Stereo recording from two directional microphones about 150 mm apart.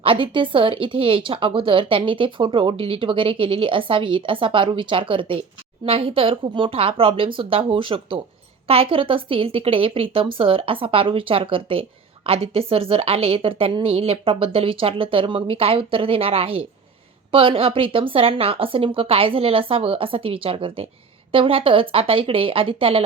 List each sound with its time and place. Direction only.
0.0 s a woman's voice: 35° right (ahead or behind)